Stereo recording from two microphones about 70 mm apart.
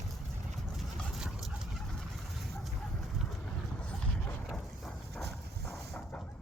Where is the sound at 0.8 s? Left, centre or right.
Centre.